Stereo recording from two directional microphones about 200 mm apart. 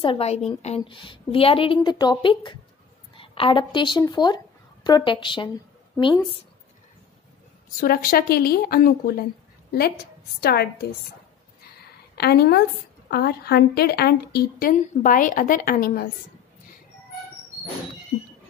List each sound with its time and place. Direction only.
0.0 s a woman's voice: 30° left (ahead or behind)
7.8 s a woman's voice: 50° left (ahead or behind)
12.2 s a woman's voice: 50° left (ahead or behind)